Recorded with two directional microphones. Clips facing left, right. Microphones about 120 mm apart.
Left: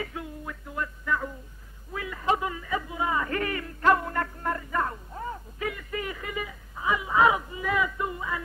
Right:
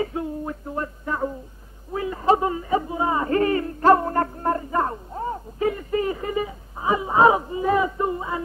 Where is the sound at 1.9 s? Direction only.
30° right (ahead or behind).